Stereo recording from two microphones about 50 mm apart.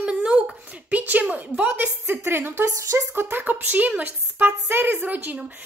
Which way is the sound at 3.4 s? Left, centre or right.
Right.